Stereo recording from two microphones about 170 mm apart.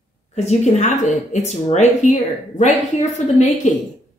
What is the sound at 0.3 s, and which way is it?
Speech, 40° left (ahead or behind).